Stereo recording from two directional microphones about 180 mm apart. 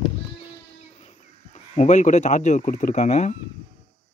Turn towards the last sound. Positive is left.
turn(degrees=40)  # may be behind; listen again after turning